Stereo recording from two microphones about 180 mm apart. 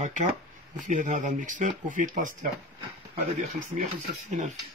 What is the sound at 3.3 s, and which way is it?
Speech, 45° right (ahead or behind).